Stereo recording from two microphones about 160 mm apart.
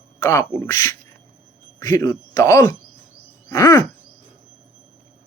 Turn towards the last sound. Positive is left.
turn(degrees=20)  # may be behind; listen again after turning